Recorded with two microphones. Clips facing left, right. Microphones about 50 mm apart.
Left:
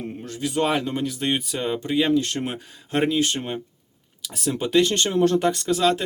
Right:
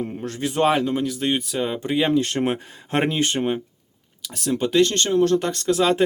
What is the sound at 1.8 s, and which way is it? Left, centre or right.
Speech, centre.